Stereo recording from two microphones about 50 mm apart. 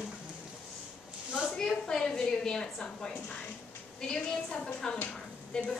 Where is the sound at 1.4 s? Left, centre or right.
Centre.